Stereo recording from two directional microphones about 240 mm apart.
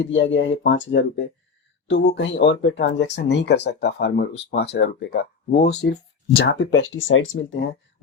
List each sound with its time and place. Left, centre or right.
0.0 s speech: left